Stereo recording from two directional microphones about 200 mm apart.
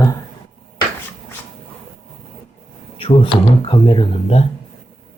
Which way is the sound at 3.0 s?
25° left (ahead or behind).